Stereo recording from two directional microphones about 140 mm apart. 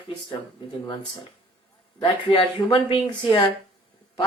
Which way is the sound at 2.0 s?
40° left (ahead or behind).